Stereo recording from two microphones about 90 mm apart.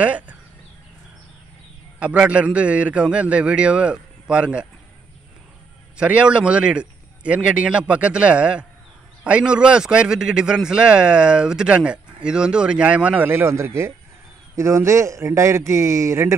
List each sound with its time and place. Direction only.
0.0 s a sound: 15° right (ahead or behind)
2.0 s a man's voice: 15° right (ahead or behind)
5.9 s a man's voice: 15° right (ahead or behind); by 16.3 s 30° right (ahead or behind)